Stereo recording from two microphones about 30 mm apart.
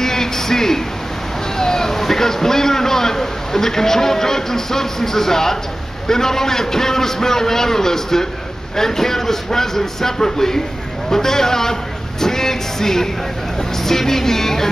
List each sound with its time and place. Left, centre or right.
0.0 s a sound: centre
1.6 s a man's voice: centre
12.2 s music: centre
13.8 s a man's voice: centre